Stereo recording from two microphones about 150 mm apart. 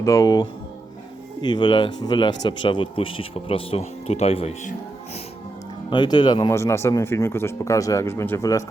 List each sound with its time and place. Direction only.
0.0 s speech: 20° left (ahead or behind); by 4.7 s 45° left (ahead or behind)
5.9 s speech: 30° left (ahead or behind)
6.5 s speech: 20° left (ahead or behind)